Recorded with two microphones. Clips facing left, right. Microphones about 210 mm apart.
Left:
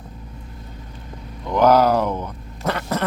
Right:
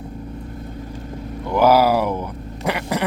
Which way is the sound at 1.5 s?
10° right (ahead or behind).